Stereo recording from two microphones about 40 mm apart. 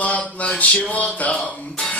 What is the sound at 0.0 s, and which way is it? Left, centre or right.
Music, left.